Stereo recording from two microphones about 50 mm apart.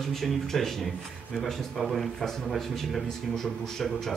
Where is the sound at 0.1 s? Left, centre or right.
Centre.